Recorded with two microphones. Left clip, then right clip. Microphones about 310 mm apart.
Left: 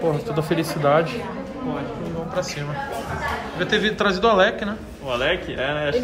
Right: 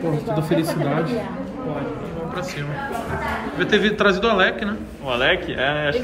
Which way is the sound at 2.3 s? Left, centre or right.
Centre.